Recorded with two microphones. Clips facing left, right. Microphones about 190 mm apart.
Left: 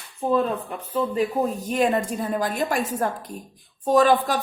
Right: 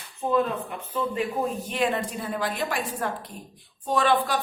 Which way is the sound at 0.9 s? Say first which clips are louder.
Left 4 dB; 40° left (ahead or behind).